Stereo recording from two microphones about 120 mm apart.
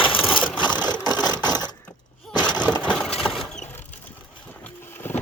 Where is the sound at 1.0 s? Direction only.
35° left (ahead or behind).